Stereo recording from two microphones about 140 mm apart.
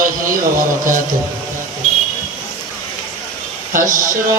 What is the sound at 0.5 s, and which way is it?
Music, 75° right (ahead or behind).